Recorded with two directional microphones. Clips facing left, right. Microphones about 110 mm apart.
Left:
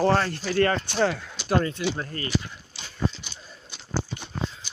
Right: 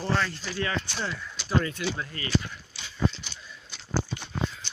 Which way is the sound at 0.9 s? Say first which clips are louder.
Left 10 dB; 75° left (ahead or behind).